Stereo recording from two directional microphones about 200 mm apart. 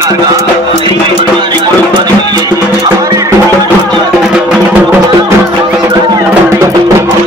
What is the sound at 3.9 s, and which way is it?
Music, centre (ahead or behind).